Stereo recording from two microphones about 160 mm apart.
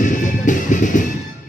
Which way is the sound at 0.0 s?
55° left (ahead or behind).